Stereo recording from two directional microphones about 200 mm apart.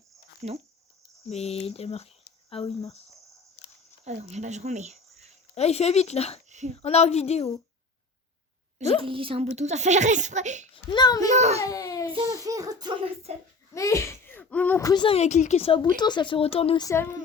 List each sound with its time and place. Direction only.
0.4 s a child's voice: 35° right (ahead or behind)
1.3 s speech: 30° left (ahead or behind)
4.0 s speech: 35° right (ahead or behind)
5.5 s speech: 35° left (ahead or behind)
6.5 s speech: 35° right (ahead or behind)
6.7 s speech: 30° left (ahead or behind)
9.0 s a child's voice: 25° right (ahead or behind)
10.9 s speech: 20° left (ahead or behind)
11.3 s a child's voice: 35° right (ahead or behind)
11.6 s baby cry: 15° left (ahead or behind)
12.1 s a child's voice: 15° right (ahead or behind)
13.3 s a child's voice: 35° right (ahead or behind)
13.7 s speech: 15° left (ahead or behind)
16.8 s speech: 15° left (ahead or behind)